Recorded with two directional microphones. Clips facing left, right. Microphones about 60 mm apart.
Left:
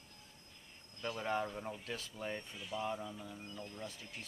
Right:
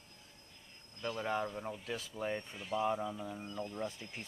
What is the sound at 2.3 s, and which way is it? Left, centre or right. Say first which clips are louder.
Speech: right 5 dB; right.